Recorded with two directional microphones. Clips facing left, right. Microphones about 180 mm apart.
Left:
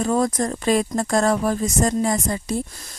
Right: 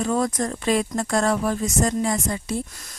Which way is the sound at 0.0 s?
40° left (ahead or behind).